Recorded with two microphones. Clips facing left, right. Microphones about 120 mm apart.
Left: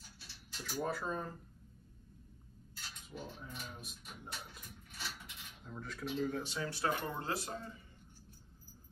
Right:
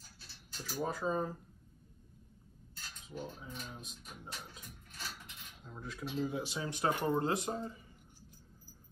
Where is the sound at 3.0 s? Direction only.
Centre (ahead or behind).